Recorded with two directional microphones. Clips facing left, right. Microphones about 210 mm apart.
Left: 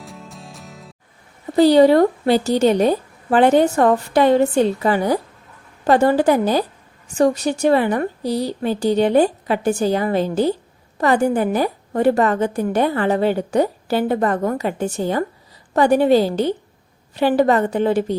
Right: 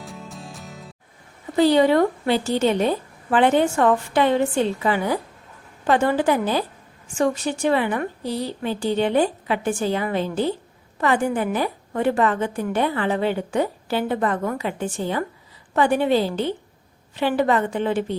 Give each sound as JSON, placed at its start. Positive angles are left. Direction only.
{"t": 0.0, "sound": "music", "side_deg": 0}
{"t": 1.5, "sound": "a woman's voice", "side_deg": 35}